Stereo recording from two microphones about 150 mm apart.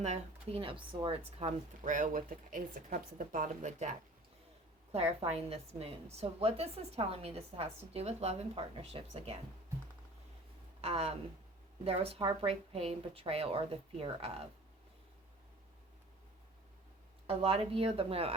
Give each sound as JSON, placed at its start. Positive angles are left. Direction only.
{"t": 0.0, "sound": "a woman's voice", "side_deg": -45}
{"t": 1.8, "sound": "speech", "side_deg": -60}
{"t": 4.9, "sound": "a woman's voice", "side_deg": -45}
{"t": 10.8, "sound": "a woman's voice", "side_deg": -45}
{"t": 17.2, "sound": "a woman's voice", "side_deg": -40}